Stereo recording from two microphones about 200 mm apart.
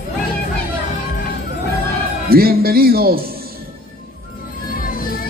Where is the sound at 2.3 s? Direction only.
50° right (ahead or behind).